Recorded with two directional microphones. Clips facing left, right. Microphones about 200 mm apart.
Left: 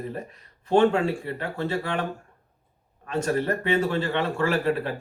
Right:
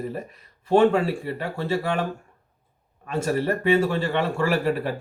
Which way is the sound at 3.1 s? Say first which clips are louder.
Right 1 dB; 10° right (ahead or behind).